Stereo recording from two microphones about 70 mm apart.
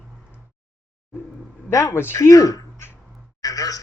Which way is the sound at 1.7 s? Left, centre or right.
Left.